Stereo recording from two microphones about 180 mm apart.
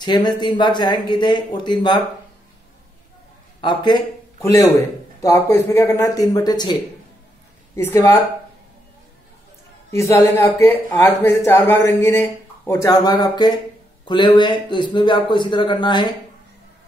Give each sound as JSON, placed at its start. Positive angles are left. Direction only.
{"t": 0.0, "sound": "speech", "side_deg": 25}
{"t": 3.6, "sound": "a man's voice", "side_deg": 25}
{"t": 7.7, "sound": "speech", "side_deg": 15}
{"t": 9.8, "sound": "speech", "side_deg": 15}